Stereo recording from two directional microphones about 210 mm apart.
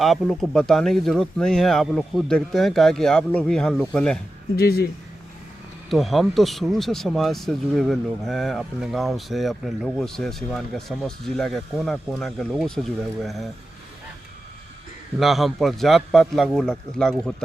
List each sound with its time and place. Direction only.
0.0 s speech: centre (ahead or behind)
4.5 s speech: 45° left (ahead or behind)
5.9 s speech: centre (ahead or behind)
15.2 s speech: centre (ahead or behind)